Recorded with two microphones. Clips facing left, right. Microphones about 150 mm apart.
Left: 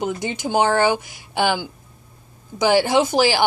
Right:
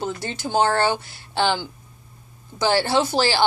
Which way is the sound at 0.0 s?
15° left (ahead or behind).